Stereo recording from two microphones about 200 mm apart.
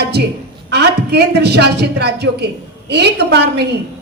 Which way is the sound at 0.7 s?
55° right (ahead or behind).